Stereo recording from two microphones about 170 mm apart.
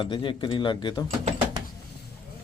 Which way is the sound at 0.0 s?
30° left (ahead or behind).